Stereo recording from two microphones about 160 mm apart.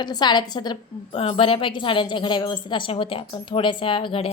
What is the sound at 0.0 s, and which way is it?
A woman's voice, 25° left (ahead or behind).